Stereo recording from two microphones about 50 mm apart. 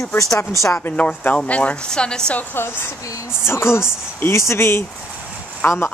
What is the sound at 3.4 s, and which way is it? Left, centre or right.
A woman's voice, left.